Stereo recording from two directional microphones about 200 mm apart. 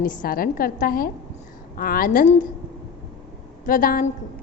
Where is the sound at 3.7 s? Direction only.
45° left (ahead or behind).